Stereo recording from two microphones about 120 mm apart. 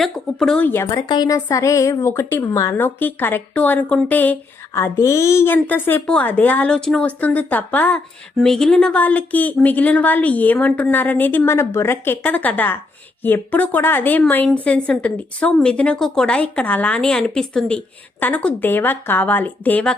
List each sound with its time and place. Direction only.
0.0 s speech: 5° left (ahead or behind)
0.7 s speech: 25° left (ahead or behind)
1.0 s a woman's voice: 35° left (ahead or behind); by 4.4 s 15° left (ahead or behind)
4.7 s a woman's voice: 25° left (ahead or behind)